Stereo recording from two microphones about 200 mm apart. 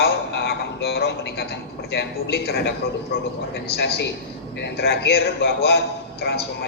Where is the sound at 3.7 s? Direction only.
55° left (ahead or behind).